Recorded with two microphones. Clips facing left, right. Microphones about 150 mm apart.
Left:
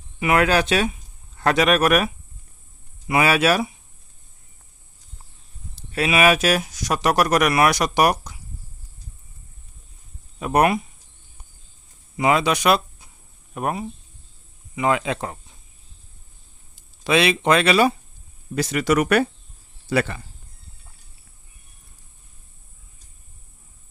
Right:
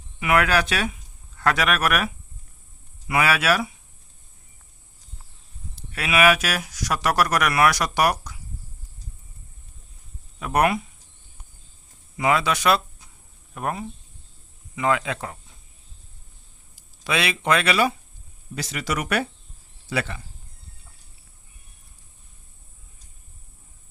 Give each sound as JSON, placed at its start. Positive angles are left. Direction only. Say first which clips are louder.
{"t": 0.2, "sound": "speech", "louder": "left 2 dB", "side_deg": 25}
{"t": 3.1, "sound": "speech", "louder": "left 3 dB", "side_deg": 25}
{"t": 5.9, "sound": "speech", "louder": "left 2 dB", "side_deg": 25}
{"t": 10.4, "sound": "speech", "louder": "left 3 dB", "side_deg": 25}
{"t": 12.1, "sound": "speech", "louder": "left 3 dB", "side_deg": 20}
{"t": 16.7, "sound": "speech", "louder": "left 6 dB", "side_deg": 25}
{"t": 18.5, "sound": "speech", "louder": "left 9 dB", "side_deg": 50}